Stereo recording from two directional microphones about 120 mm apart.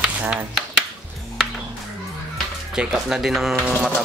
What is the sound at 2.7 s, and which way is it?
Speech, 5° right (ahead or behind).